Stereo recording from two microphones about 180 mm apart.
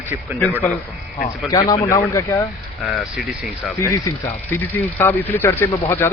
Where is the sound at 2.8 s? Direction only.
Centre (ahead or behind).